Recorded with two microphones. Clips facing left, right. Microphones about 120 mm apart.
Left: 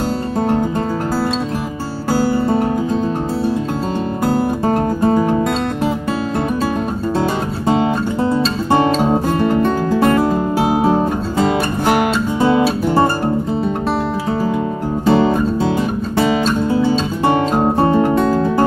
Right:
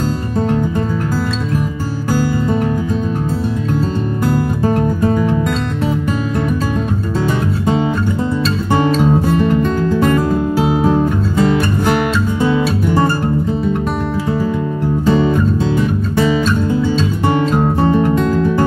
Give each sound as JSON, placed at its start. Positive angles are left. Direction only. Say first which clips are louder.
{"t": 4.3, "sound": "music", "louder": "left 1 dB", "side_deg": 25}
{"t": 9.0, "sound": "music", "louder": "right 1 dB", "side_deg": 15}
{"t": 10.1, "sound": "music", "louder": "even", "side_deg": 35}
{"t": 12.4, "sound": "music", "louder": "left 3 dB", "side_deg": 20}
{"t": 15.0, "sound": "music", "louder": "left 1 dB", "side_deg": 25}
{"t": 17.8, "sound": "music", "louder": "right 2 dB", "side_deg": 40}
{"t": 18.1, "sound": "music", "louder": "even", "side_deg": 15}